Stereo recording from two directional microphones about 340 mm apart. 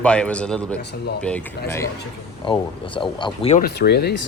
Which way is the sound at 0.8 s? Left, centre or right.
Left.